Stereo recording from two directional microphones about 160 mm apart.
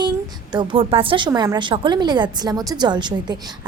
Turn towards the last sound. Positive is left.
turn(degrees=-25)  # may be behind; listen again after turning